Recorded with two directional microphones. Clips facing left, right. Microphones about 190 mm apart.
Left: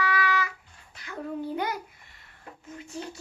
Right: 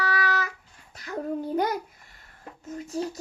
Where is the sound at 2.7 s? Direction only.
40° right (ahead or behind).